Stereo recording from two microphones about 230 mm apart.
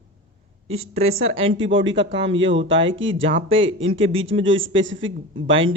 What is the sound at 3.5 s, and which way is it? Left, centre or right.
Speech, right.